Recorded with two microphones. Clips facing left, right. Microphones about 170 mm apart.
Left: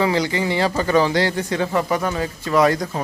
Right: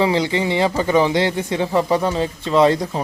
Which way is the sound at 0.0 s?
25° right (ahead or behind).